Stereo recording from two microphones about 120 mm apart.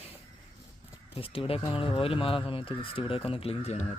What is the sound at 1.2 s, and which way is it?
Speech, 50° left (ahead or behind).